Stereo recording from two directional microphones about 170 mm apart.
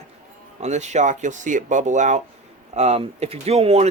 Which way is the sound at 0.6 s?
45° right (ahead or behind).